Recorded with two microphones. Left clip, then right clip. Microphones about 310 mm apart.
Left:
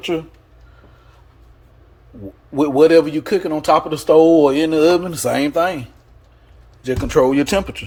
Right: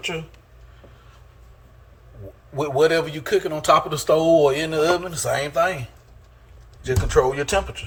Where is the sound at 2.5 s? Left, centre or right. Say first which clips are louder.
Left 7 dB; left.